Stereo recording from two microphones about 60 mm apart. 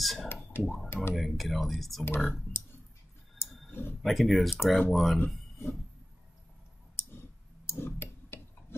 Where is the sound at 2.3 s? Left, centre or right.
Left.